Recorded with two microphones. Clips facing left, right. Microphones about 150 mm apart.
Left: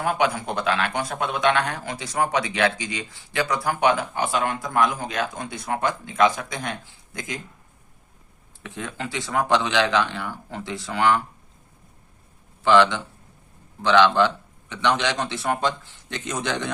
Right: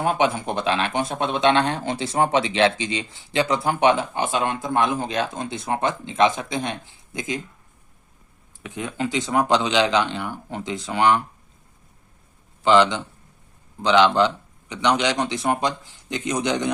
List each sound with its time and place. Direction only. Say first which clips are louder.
0.0 s a man's voice: right 2 dB; 25° right (ahead or behind)
8.6 s a man's voice: right 5 dB; 15° right (ahead or behind)
12.6 s a man's voice: right 1 dB; 20° right (ahead or behind)